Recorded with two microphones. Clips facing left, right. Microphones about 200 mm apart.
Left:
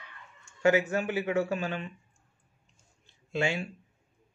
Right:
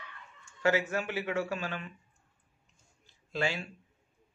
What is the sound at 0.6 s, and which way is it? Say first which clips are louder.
Speech: left 4 dB; 20° left (ahead or behind).